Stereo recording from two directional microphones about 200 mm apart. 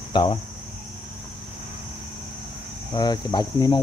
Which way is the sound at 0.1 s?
20° left (ahead or behind).